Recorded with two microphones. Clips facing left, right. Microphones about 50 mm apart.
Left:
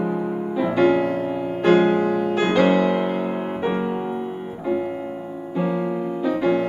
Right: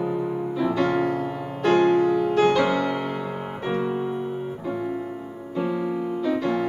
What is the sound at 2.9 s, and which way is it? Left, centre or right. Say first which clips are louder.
Music: left 5 dB; centre.